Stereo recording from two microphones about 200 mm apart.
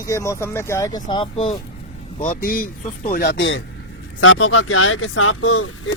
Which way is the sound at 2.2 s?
45° left (ahead or behind).